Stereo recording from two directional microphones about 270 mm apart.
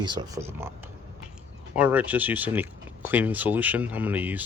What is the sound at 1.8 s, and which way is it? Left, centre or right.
Speech, centre.